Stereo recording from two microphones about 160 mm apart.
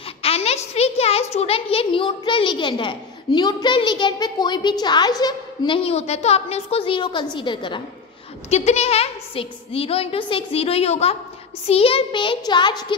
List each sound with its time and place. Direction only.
0.2 s a child's voice: 40° left (ahead or behind)
8.5 s a child's voice: 45° left (ahead or behind); by 12.8 s 25° left (ahead or behind)